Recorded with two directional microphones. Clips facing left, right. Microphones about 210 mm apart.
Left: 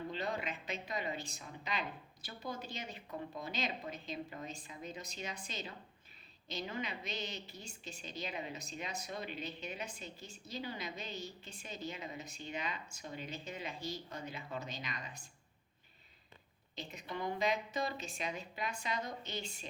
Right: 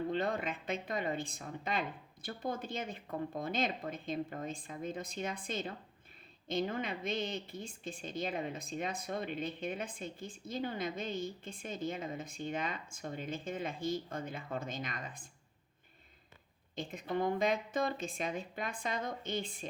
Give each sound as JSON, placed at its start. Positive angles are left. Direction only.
{"t": 0.1, "sound": "a woman's voice", "side_deg": -50}
{"t": 16.7, "sound": "a woman's voice", "side_deg": -50}